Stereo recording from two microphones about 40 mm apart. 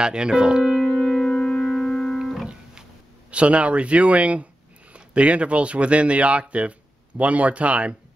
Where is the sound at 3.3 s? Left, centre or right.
Right.